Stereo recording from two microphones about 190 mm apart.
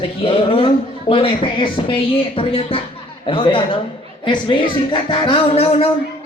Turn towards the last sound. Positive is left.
turn(degrees=30)  # may be behind; listen again after turning